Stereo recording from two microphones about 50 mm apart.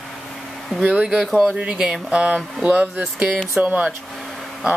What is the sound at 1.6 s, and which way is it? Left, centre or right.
Speech, centre.